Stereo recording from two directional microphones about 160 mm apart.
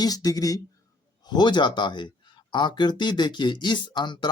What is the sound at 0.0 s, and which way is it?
Speech, 25° left (ahead or behind).